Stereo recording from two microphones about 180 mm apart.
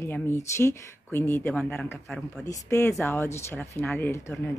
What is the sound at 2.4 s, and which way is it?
A woman's voice, 15° left (ahead or behind).